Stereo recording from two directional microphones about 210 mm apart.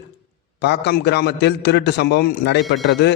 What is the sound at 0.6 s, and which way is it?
A man's voice, 50° left (ahead or behind).